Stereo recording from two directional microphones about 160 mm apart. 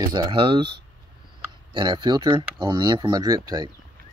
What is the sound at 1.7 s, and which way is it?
Speech, 30° right (ahead or behind).